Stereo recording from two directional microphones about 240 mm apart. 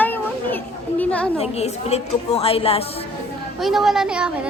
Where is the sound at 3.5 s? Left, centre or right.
Centre.